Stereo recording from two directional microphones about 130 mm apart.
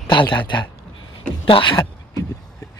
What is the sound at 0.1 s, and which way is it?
Speech, 35° left (ahead or behind).